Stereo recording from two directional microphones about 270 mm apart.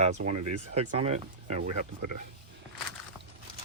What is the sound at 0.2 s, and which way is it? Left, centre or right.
Speech, right.